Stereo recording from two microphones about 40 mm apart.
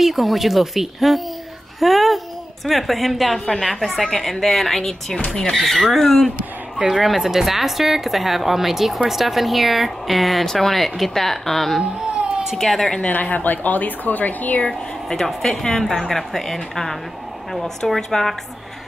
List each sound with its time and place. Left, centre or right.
0.0 s a woman's voice: centre
5.6 s a woman's voice: centre
6.9 s a woman's voice: centre
13.0 s a woman's voice: left
14.7 s a woman's voice: centre